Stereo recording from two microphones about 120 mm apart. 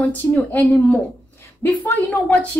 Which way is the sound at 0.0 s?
15° left (ahead or behind).